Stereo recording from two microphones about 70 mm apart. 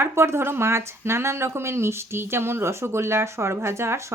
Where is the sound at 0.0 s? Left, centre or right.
Right.